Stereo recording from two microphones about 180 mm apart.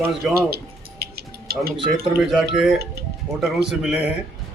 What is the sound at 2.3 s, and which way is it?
Speech, centre (ahead or behind).